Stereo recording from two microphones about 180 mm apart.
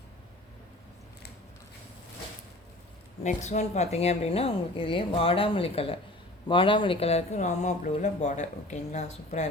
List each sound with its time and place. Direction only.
3.2 s speech: 40° left (ahead or behind)